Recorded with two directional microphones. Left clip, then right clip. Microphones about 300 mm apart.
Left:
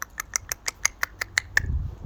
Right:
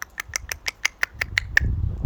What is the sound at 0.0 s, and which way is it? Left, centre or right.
Squawk, centre.